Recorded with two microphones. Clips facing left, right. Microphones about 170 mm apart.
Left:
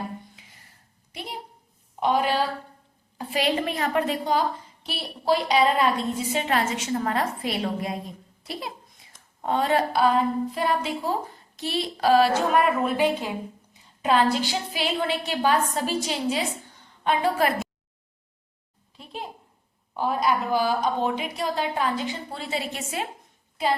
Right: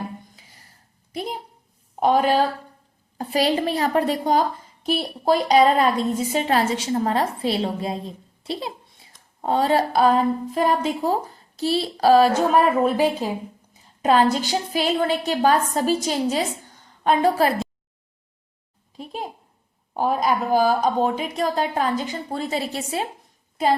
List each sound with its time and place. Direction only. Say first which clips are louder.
2.0 s a woman's voice: right 5 dB; 45° right (ahead or behind)
19.9 s a woman's voice: right 3 dB; 45° right (ahead or behind)